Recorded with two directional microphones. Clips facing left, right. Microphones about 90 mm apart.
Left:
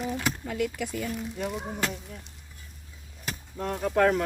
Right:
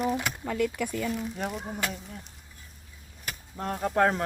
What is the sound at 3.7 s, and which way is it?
Speech, 25° right (ahead or behind).